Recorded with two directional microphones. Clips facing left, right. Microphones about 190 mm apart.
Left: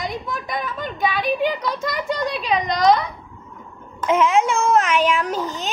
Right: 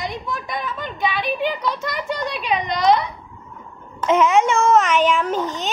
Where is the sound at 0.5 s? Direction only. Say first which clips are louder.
Left 1 dB; 45° left (ahead or behind).